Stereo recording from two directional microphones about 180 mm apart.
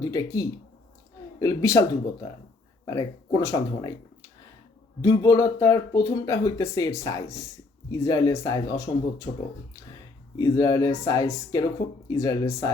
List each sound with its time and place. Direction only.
0.0 s speech: 20° left (ahead or behind)
2.8 s speech: 20° left (ahead or behind)
10.3 s speech: 20° left (ahead or behind)